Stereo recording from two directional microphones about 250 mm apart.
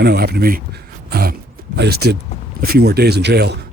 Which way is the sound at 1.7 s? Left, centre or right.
Right.